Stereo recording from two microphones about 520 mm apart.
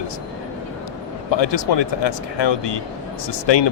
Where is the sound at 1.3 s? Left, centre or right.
Left.